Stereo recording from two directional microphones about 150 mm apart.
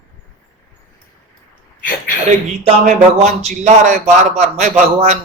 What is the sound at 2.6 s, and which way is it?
Speech, 50° right (ahead or behind).